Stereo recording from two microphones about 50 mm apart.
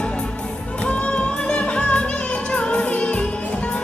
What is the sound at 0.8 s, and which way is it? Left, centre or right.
Music, left.